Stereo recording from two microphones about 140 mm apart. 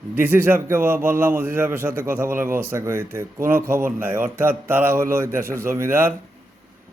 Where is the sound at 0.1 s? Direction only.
15° right (ahead or behind).